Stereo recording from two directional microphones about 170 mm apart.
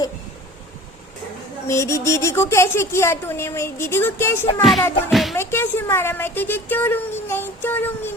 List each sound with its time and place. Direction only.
1.6 s speech: 15° left (ahead or behind)
5.1 s speech: centre (ahead or behind)
5.4 s speech: 15° left (ahead or behind)